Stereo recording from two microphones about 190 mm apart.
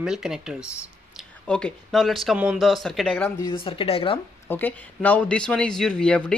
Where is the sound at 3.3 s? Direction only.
25° left (ahead or behind).